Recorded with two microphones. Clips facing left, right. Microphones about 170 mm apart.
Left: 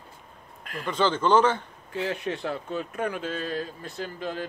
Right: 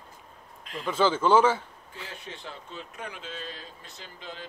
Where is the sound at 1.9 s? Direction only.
70° left (ahead or behind).